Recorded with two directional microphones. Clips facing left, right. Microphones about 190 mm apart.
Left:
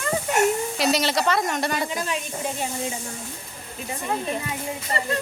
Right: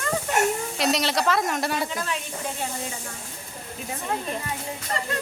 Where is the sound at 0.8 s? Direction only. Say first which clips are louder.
Even; centre (ahead or behind).